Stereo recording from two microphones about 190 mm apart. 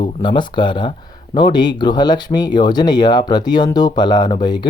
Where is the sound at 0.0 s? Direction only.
25° left (ahead or behind).